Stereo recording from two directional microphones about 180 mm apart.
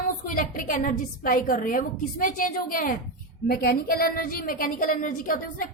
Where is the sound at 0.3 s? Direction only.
50° left (ahead or behind).